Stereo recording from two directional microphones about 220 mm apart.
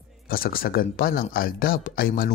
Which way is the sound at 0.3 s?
40° left (ahead or behind).